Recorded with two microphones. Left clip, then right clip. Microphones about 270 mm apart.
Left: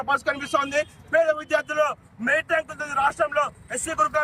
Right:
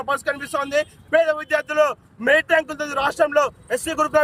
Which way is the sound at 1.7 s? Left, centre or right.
Right.